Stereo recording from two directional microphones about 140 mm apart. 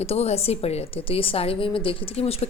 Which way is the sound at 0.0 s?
45° left (ahead or behind).